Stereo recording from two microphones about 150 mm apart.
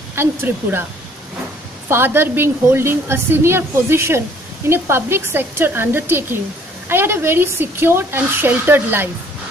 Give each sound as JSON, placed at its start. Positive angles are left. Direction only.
{"t": 0.1, "sound": "a woman's voice", "side_deg": -15}
{"t": 1.9, "sound": "a woman's voice", "side_deg": -15}